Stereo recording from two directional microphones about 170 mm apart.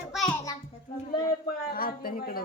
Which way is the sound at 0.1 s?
Centre (ahead or behind).